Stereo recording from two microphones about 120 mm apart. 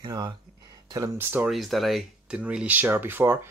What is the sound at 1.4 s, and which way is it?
Speech, centre (ahead or behind).